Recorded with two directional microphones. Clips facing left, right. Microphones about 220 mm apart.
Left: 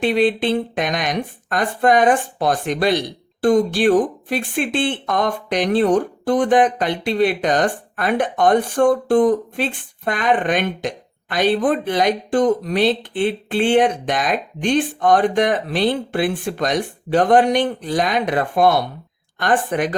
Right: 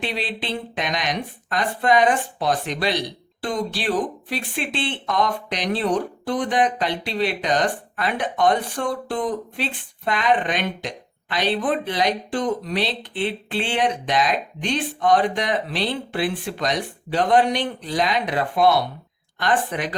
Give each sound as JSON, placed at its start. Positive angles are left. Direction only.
{"t": 0.0, "sound": "speech", "side_deg": 50}